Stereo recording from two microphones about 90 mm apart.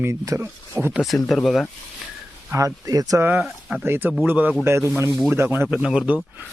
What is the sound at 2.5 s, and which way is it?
Speech, 35° right (ahead or behind).